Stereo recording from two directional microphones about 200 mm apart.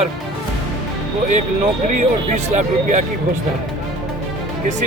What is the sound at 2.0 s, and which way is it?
Speech, 35° right (ahead or behind).